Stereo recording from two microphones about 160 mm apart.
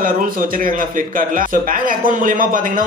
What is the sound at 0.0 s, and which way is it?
A man's voice, 60° right (ahead or behind).